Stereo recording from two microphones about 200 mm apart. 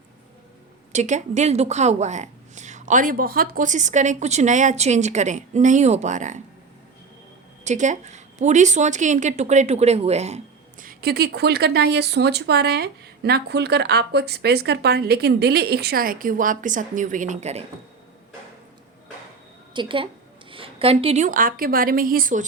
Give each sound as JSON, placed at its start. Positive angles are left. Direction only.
{"t": 0.9, "sound": "a woman's voice", "side_deg": -35}
{"t": 7.6, "sound": "a woman's voice", "side_deg": -35}
{"t": 19.7, "sound": "a woman's voice", "side_deg": -25}